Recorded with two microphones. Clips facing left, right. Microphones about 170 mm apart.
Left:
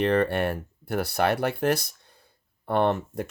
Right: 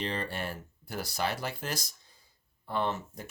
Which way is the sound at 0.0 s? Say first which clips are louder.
Left 12 dB; 60° left (ahead or behind).